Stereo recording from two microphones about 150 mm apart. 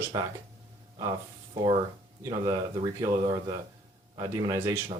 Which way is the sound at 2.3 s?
30° right (ahead or behind).